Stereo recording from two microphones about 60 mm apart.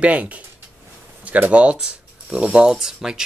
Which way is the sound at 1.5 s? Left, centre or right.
Centre.